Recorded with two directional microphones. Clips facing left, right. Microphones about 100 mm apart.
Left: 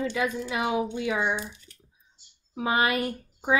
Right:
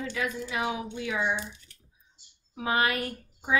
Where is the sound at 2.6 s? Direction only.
20° left (ahead or behind).